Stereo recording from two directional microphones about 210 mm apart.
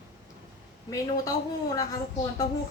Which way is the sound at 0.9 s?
15° left (ahead or behind).